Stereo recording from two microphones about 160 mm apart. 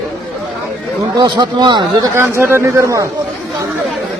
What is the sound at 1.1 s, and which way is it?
Speech, 30° right (ahead or behind).